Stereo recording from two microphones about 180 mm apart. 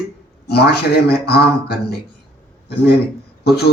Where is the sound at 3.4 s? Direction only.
60° left (ahead or behind).